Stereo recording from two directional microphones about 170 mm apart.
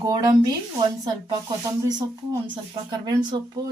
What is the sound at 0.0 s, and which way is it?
Speech, 20° right (ahead or behind).